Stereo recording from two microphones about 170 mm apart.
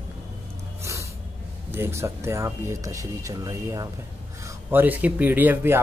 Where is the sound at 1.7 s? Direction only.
15° right (ahead or behind).